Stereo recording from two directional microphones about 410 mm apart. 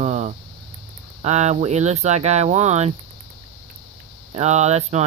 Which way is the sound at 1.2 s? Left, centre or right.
Centre.